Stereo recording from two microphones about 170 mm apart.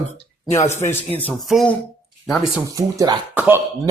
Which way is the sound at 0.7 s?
15° left (ahead or behind).